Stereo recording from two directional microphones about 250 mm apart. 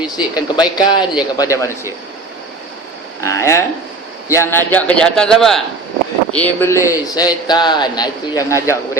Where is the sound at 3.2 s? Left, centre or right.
Centre.